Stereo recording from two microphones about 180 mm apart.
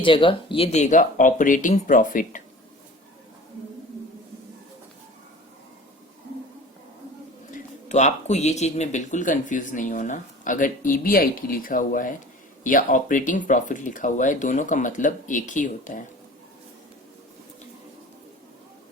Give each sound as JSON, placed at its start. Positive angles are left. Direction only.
{"t": 0.0, "sound": "speech", "side_deg": 30}
{"t": 7.5, "sound": "speech", "side_deg": 40}